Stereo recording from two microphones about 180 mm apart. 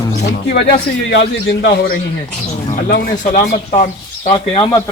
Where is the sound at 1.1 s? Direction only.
80° left.